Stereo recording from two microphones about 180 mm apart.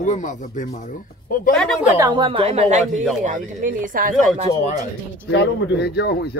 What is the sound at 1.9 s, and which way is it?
Speech, 25° right (ahead or behind).